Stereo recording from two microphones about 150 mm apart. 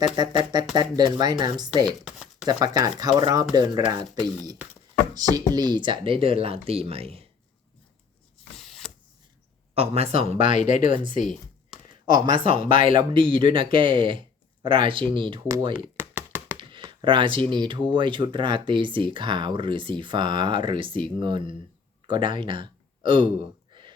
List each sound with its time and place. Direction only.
0.0 s speech: 30° right (ahead or behind)
2.0 s a sound: 5° right (ahead or behind)
2.5 s speech: 30° right (ahead or behind)
8.5 s a sound: centre (ahead or behind)
9.7 s speech: 40° right (ahead or behind)
10.4 s speech: 55° left (ahead or behind)
12.0 s speech: 30° right (ahead or behind)
12.4 s speech: 65° left (ahead or behind)
12.9 s speech: 35° right (ahead or behind)
15.7 s knock: 15° right (ahead or behind)
16.6 s speech: 30° right (ahead or behind)
22.0 s gasp: 30° right (ahead or behind)